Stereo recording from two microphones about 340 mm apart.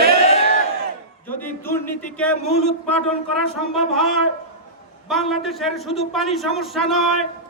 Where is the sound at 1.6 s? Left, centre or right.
Centre.